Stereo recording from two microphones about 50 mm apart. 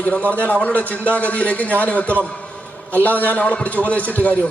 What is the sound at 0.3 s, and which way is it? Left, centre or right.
A man's voice, left.